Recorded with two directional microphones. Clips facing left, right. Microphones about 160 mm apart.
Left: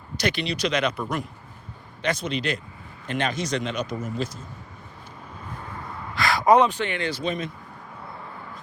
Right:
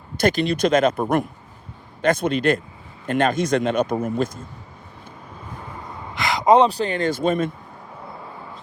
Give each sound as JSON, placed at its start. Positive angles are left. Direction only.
{"t": 0.2, "sound": "speech", "side_deg": -50}
{"t": 5.6, "sound": "a sound", "side_deg": -15}
{"t": 6.7, "sound": "speech", "side_deg": -35}